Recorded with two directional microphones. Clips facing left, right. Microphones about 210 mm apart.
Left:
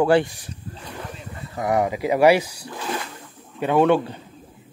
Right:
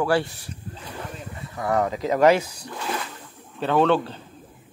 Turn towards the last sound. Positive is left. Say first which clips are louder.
# left 2 dB
turn(degrees=15)  # may be behind; listen again after turning